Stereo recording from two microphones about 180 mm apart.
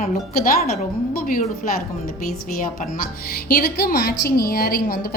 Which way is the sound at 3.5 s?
55° left (ahead or behind).